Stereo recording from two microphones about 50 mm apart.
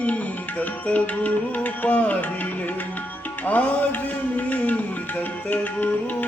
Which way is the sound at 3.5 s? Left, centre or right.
Left.